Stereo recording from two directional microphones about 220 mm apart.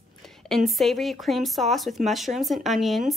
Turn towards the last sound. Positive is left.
turn(degrees=0)  # may be behind; listen again after turning